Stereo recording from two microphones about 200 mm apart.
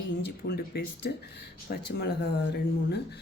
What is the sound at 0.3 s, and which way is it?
Speech, 55° left (ahead or behind).